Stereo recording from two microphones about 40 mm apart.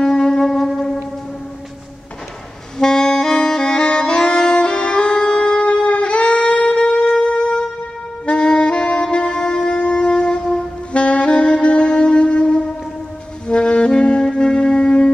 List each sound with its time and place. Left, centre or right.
0.0 s shofar: centre
2.8 s saxophone: centre
7.2 s wind instrument: left
8.3 s saxophone: left
13.5 s music: left